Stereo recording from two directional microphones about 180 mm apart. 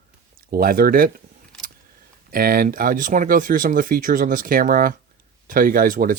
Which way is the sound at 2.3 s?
55° right (ahead or behind).